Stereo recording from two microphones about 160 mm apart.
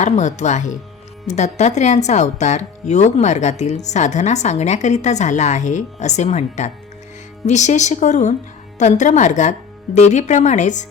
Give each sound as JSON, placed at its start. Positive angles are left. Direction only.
{"t": 0.0, "sound": "a woman's voice", "side_deg": 50}